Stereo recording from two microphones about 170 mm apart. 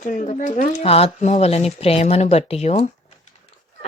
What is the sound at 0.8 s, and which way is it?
Speech, 35° left (ahead or behind).